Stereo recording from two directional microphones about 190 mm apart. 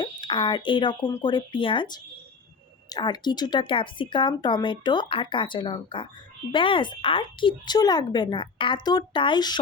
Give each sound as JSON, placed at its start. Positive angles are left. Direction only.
{"t": 0.0, "sound": "speech", "side_deg": 25}